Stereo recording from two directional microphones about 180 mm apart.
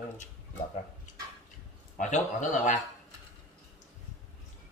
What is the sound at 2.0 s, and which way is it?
Speech, 40° left (ahead or behind).